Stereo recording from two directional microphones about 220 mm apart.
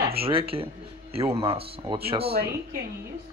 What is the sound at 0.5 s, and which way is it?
Speech, 25° right (ahead or behind).